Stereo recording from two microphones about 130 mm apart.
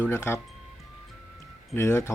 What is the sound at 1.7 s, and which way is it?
Speech, 20° left (ahead or behind).